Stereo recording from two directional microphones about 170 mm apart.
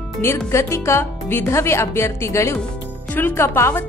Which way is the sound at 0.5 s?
15° left (ahead or behind).